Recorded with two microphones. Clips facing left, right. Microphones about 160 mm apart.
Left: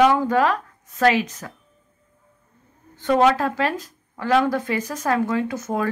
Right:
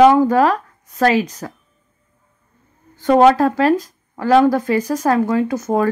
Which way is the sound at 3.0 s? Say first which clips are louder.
Right 6 dB; 40° right (ahead or behind).